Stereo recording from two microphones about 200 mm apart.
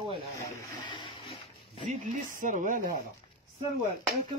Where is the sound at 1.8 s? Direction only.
40° right (ahead or behind).